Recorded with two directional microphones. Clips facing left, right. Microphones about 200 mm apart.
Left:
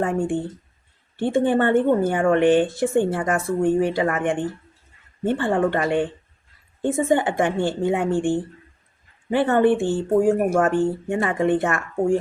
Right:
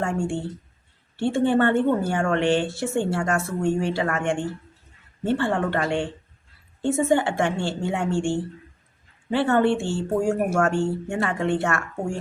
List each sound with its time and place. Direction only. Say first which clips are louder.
0.0 s a woman's voice: left 3 dB; 15° left (ahead or behind)